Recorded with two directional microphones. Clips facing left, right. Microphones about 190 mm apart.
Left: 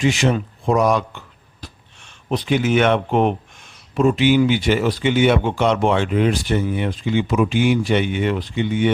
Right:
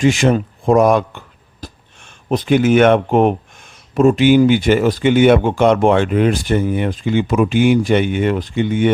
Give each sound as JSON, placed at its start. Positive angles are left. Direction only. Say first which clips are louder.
{"t": 0.0, "sound": "speech", "louder": "right 5 dB", "side_deg": -50}